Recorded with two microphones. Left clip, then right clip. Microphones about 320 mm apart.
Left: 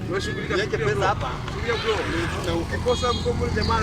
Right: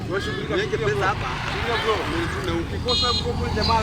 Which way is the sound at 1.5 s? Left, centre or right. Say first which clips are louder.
Right 2 dB; right.